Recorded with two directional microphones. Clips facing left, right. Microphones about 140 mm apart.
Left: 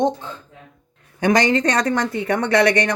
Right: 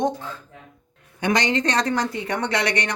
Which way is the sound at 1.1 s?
45° left (ahead or behind).